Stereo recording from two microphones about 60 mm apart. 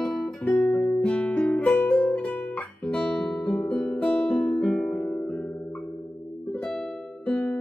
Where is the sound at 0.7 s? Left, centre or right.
Centre.